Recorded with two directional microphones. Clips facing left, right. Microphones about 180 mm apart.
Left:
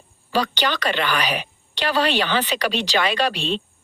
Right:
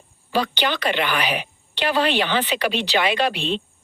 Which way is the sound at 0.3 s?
15° right (ahead or behind).